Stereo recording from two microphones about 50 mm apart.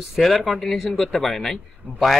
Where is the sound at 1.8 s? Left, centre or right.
Right.